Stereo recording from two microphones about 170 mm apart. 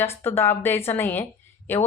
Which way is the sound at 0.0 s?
15° left (ahead or behind).